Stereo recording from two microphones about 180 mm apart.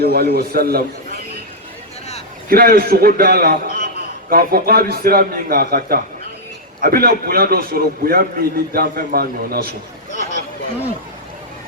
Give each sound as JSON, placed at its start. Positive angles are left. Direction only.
{"t": 0.0, "sound": "a man's voice", "side_deg": -60}
{"t": 2.5, "sound": "a man's voice", "side_deg": -55}